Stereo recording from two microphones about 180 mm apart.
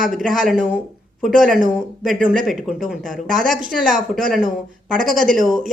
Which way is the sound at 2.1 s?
50° right (ahead or behind).